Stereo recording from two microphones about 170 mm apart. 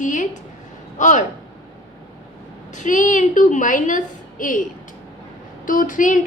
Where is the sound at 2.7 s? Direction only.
45° left (ahead or behind).